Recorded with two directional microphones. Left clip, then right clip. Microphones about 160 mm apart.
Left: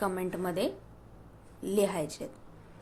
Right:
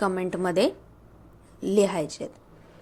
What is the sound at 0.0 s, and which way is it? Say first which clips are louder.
A woman's voice: right 6 dB; 30° right (ahead or behind).